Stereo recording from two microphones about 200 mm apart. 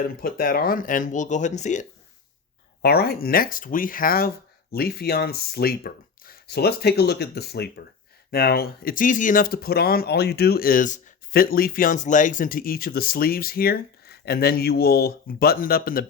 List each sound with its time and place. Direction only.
0.2 s speech: 45° left (ahead or behind)
2.8 s speech: 50° left (ahead or behind)